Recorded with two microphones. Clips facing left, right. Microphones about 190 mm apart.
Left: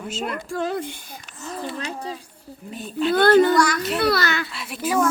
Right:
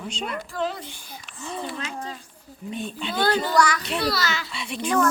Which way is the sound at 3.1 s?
55° left (ahead or behind).